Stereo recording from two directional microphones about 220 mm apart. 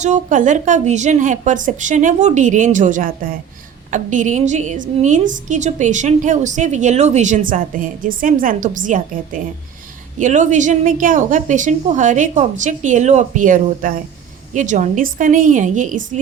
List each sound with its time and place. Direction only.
0.0 s a woman's voice: 35° right (ahead or behind)